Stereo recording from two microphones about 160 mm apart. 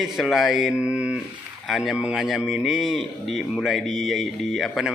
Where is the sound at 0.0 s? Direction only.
Centre (ahead or behind).